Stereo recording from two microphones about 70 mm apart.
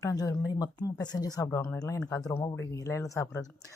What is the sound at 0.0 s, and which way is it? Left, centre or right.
Speech, left.